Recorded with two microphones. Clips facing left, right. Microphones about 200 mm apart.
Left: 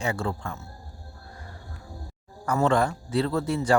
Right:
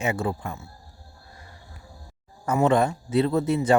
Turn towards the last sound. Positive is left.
turn(degrees=-20)  # may be behind; listen again after turning